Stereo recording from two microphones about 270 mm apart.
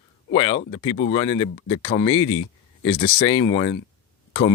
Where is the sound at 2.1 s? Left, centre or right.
Left.